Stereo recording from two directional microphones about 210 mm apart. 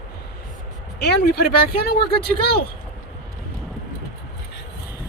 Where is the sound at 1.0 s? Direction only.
50° left (ahead or behind).